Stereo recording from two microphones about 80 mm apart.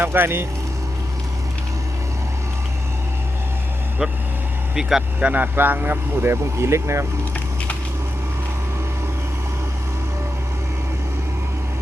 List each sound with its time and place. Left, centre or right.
0.0 s speech: right
4.7 s speech: centre
5.2 s speech: right